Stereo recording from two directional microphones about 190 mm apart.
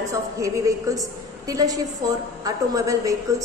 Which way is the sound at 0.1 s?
15° right (ahead or behind).